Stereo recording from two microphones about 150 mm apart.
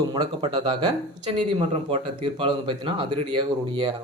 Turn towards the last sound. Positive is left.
turn(degrees=-30)  # may be behind; listen again after turning